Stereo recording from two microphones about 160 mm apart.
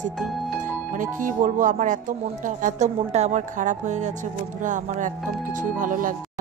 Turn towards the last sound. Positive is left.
turn(degrees=-55)  # may be behind; listen again after turning